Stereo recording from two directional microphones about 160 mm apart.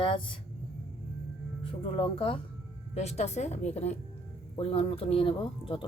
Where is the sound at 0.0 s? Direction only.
35° left (ahead or behind).